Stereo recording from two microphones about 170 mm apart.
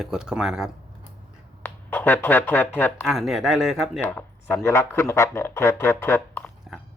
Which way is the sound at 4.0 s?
10° left (ahead or behind).